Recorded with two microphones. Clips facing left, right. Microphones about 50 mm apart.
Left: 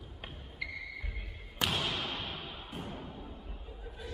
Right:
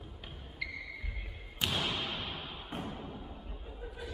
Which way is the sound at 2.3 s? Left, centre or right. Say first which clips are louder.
Even; right.